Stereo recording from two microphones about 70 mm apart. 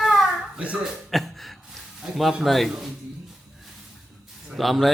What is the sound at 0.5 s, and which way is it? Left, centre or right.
Speech, centre.